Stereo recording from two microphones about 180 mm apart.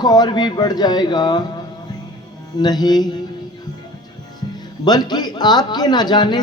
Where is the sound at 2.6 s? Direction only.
20° left (ahead or behind).